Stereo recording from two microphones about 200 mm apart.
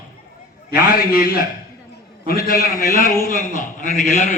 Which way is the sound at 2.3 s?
50° left (ahead or behind).